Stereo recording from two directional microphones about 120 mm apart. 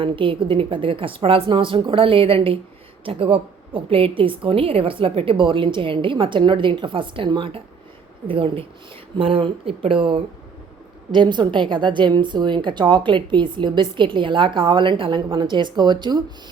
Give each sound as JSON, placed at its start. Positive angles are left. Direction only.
{"t": 0.0, "sound": "a woman's voice", "side_deg": -45}